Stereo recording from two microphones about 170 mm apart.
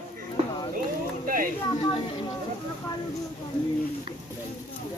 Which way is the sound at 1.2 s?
55° right (ahead or behind).